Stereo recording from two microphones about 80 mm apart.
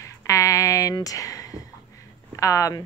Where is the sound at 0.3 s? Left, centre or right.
Left.